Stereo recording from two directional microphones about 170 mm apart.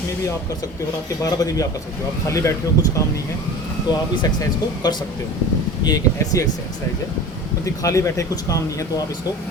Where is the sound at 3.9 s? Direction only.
25° left (ahead or behind).